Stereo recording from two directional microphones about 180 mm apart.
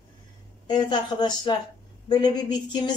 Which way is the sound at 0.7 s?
25° left (ahead or behind).